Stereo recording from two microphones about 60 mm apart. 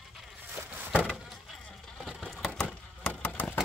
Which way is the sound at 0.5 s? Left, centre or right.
Right.